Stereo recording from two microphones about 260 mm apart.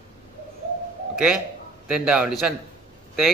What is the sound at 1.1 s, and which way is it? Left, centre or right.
A man's voice, centre.